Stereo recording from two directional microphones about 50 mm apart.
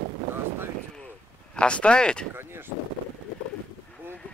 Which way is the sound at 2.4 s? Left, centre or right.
Right.